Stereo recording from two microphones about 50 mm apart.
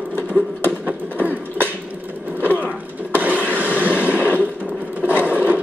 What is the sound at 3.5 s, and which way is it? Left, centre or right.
Train, right.